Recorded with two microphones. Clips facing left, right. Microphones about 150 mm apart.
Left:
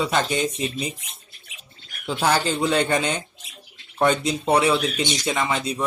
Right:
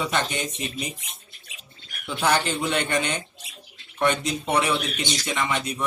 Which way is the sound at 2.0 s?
30° left (ahead or behind).